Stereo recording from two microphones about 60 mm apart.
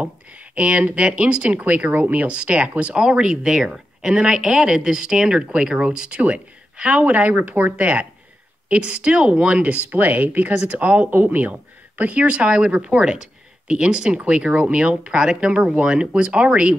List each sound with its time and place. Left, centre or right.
0.0 s speech: right